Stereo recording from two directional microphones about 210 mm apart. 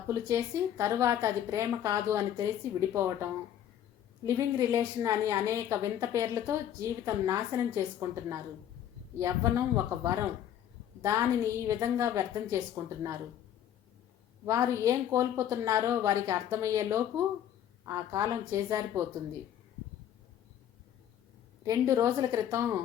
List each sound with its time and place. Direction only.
0.1 s a woman's voice: 15° right (ahead or behind)
4.4 s a woman's voice: 15° right (ahead or behind)
14.4 s a woman's voice: 15° right (ahead or behind)
21.6 s a woman's voice: 15° right (ahead or behind)